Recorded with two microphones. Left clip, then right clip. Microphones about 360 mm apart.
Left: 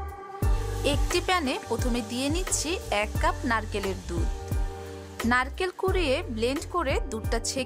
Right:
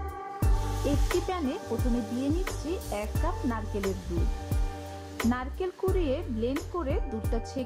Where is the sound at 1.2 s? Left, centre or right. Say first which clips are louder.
Left 6 dB; left.